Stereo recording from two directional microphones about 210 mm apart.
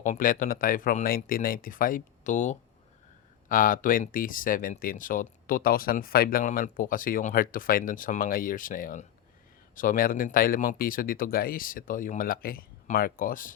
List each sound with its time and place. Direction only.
0.0 s speech: 40° left (ahead or behind)